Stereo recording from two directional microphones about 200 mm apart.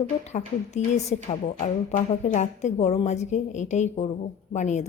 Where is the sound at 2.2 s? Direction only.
35° left (ahead or behind).